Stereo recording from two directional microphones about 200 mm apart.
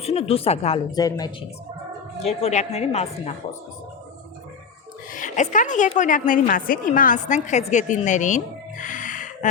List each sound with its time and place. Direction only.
0.0 s a woman's voice: 30° left (ahead or behind)
0.9 s speech: 20° left (ahead or behind)
2.2 s a woman's voice: 35° left (ahead or behind)
5.1 s a woman's voice: 40° left (ahead or behind)
8.8 s music: 40° left (ahead or behind)